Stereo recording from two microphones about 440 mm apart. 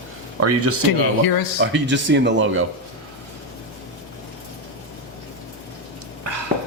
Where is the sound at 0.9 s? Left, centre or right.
Left.